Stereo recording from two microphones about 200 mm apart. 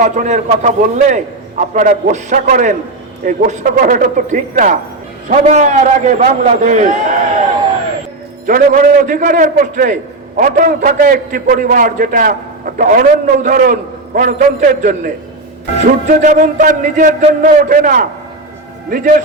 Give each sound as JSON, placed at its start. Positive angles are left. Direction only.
{"t": 0.0, "sound": "a man's voice", "side_deg": -40}
{"t": 8.4, "sound": "a man's voice", "side_deg": -40}